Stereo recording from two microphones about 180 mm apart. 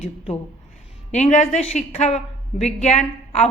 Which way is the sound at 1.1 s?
40° left (ahead or behind).